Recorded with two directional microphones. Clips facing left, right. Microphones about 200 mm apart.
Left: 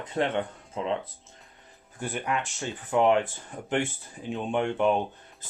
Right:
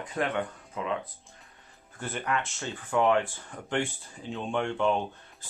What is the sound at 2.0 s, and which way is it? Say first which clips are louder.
Speech: left 1 dB; 15° left (ahead or behind).